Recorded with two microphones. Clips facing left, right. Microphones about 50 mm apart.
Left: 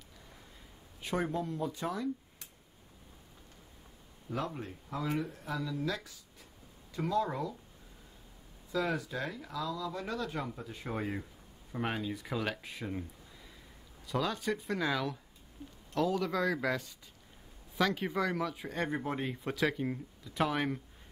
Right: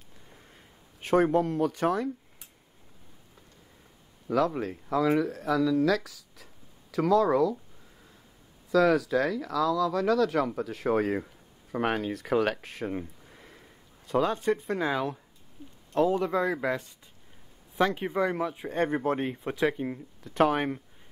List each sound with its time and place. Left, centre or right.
1.0 s speech: right
4.3 s speech: right
8.7 s speech: right
13.3 s a sound: right
15.9 s speech: right
19.3 s speech: right
20.2 s speech: right